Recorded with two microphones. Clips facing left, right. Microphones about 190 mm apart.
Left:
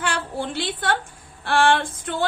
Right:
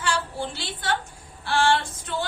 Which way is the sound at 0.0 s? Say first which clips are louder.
Left 1 dB; 55° left (ahead or behind).